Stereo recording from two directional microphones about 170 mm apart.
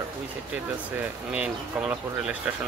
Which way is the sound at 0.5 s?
10° right (ahead or behind).